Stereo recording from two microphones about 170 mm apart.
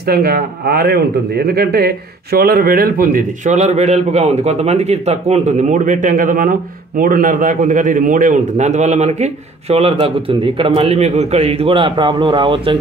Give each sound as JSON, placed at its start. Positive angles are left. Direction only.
{"t": 0.0, "sound": "a man's voice", "side_deg": -65}